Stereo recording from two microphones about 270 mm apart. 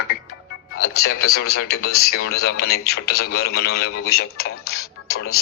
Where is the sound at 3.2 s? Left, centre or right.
Left.